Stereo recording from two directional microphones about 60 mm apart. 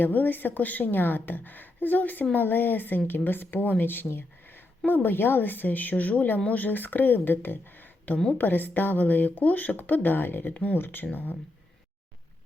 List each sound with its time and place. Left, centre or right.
0.0 s speech: left